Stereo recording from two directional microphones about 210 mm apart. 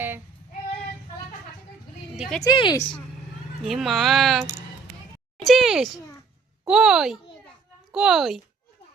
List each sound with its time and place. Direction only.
2.4 s a woman's voice: 20° left (ahead or behind)
3.7 s speech: centre (ahead or behind)
5.5 s speech: centre (ahead or behind)